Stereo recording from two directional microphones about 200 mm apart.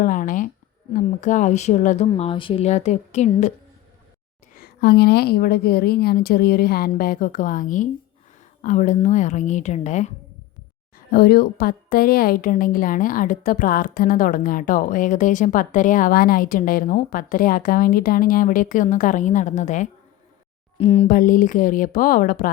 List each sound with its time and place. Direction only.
0.0 s a sound: 45° left (ahead or behind)
0.9 s a woman's voice: 40° left (ahead or behind)
2.0 s a woman's voice: 30° left (ahead or behind)
4.5 s a woman's voice: 50° left (ahead or behind); by 10.1 s 35° left (ahead or behind)
10.9 s a woman's voice: 50° left (ahead or behind); by 21.1 s 30° left (ahead or behind)
21.1 s a woman's voice: 40° left (ahead or behind)